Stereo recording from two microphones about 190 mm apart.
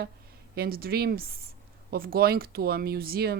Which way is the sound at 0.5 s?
55° right (ahead or behind).